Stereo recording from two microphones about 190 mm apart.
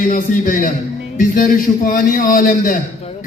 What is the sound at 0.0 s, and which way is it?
Speech, 45° left (ahead or behind).